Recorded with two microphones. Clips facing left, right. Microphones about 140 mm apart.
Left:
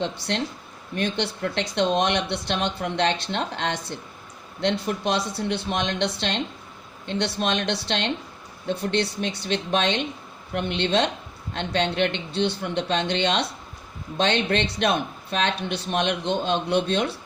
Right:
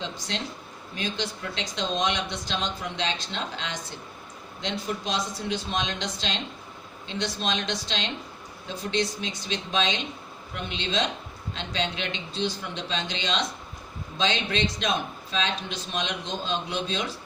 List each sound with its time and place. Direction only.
0.0 s speech: 60° left (ahead or behind)